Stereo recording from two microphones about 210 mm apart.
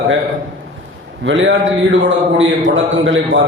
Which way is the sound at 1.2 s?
60° right (ahead or behind).